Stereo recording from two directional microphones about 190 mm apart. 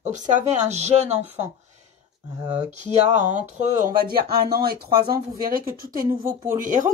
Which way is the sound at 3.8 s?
50° right (ahead or behind).